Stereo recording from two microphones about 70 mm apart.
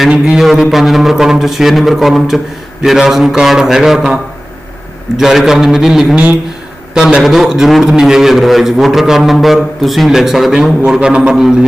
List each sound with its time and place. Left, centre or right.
0.1 s a man's voice: centre